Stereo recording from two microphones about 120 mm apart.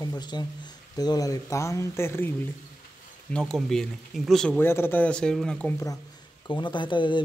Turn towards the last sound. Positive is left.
turn(degrees=40)  # may be behind; listen again after turning